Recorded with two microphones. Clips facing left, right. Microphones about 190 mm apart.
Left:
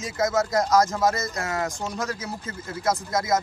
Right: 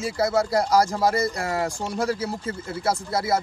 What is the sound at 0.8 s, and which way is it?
A man's voice, 30° right (ahead or behind).